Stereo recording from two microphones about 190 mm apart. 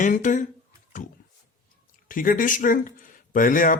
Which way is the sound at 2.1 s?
45° left (ahead or behind).